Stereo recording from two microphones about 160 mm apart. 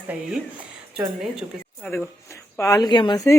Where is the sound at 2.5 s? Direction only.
20° left (ahead or behind).